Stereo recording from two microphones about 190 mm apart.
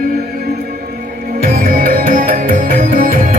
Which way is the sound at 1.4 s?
50° right (ahead or behind).